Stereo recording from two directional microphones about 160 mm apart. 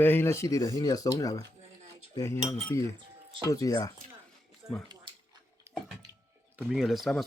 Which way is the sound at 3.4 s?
20° left (ahead or behind).